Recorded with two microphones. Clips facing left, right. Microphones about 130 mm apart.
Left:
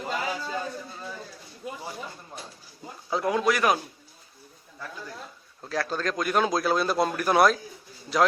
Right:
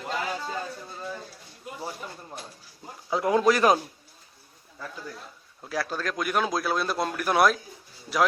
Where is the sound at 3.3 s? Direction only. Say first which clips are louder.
Right 4 dB; 30° right (ahead or behind).